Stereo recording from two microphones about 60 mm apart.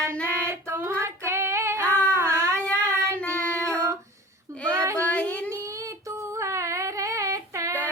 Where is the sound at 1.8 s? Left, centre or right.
Left.